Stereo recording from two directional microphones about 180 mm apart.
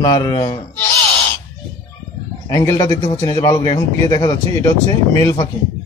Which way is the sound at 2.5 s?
20° left (ahead or behind).